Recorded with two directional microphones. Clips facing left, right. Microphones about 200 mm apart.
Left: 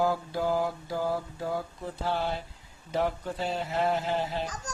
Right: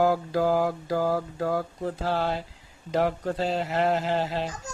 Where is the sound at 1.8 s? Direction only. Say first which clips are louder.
Right 3 dB; 90° right.